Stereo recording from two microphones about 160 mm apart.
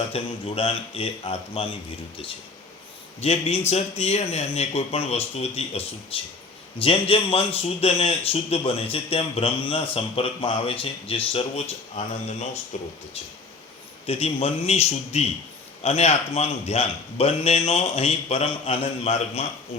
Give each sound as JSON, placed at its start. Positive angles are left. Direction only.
{"t": 0.1, "sound": "a man's voice", "side_deg": 35}
{"t": 3.2, "sound": "a man's voice", "side_deg": 40}
{"t": 14.1, "sound": "a man's voice", "side_deg": 40}